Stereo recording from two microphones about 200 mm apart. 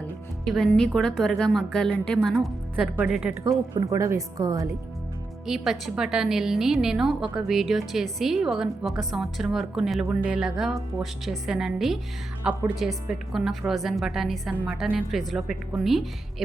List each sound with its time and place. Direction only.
0.5 s a woman's voice: centre (ahead or behind)
3.8 s speech: 15° right (ahead or behind)
5.5 s a woman's voice: centre (ahead or behind)